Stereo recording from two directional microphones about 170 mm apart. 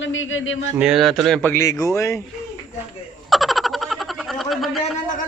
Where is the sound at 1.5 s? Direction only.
20° left (ahead or behind).